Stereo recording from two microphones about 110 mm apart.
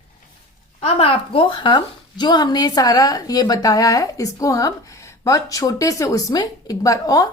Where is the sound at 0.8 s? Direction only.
60° left (ahead or behind).